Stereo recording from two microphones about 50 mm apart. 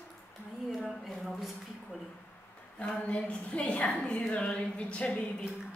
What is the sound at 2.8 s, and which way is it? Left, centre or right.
A woman's voice, left.